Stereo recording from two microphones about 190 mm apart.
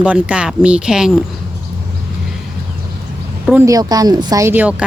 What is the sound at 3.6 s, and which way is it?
Speech, 20° right (ahead or behind).